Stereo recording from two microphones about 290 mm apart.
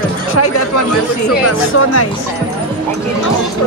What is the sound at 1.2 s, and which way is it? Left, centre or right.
Speech, left.